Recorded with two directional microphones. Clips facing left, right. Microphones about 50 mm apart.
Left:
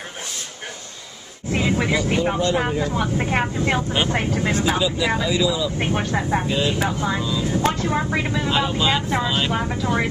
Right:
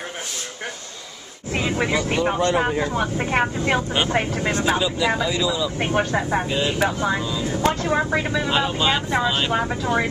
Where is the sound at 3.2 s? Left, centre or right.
Centre.